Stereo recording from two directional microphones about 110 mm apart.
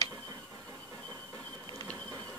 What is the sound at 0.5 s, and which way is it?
Train, 25° right (ahead or behind).